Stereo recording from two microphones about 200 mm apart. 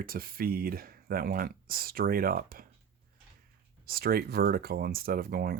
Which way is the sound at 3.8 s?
50° right (ahead or behind).